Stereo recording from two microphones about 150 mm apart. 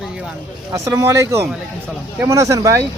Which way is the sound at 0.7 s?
20° right (ahead or behind).